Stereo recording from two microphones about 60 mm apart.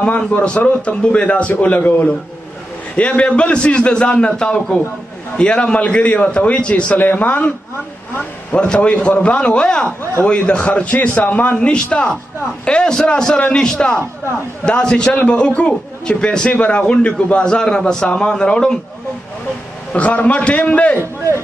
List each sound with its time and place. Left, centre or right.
0.0 s a man's voice: left
19.9 s a man's voice: left